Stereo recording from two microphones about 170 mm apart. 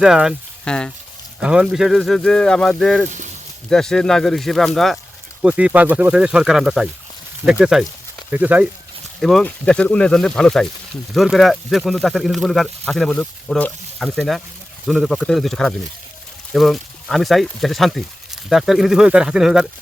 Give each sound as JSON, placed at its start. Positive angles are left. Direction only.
{"t": 0.0, "sound": "speech", "side_deg": -5}
{"t": 1.4, "sound": "speech", "side_deg": -5}
{"t": 3.1, "sound": "speech", "side_deg": -45}
{"t": 3.7, "sound": "speech", "side_deg": 5}
{"t": 9.2, "sound": "speech", "side_deg": 5}